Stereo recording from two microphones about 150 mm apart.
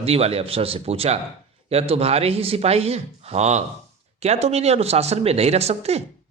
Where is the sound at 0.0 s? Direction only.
40° right (ahead or behind).